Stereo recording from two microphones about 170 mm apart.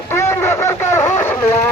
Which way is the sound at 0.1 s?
15° left (ahead or behind).